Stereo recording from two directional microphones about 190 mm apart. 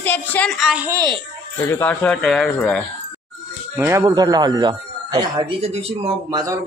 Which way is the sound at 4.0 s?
20° right (ahead or behind).